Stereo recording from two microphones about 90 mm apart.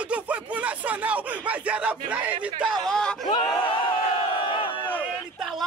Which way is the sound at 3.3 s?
60° left (ahead or behind).